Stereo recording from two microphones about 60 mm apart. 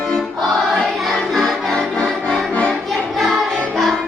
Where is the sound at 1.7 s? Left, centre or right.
Centre.